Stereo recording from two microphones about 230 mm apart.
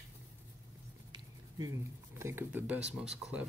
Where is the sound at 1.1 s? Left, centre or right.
Centre.